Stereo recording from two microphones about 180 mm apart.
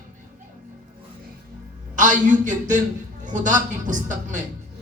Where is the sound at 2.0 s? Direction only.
45° right (ahead or behind).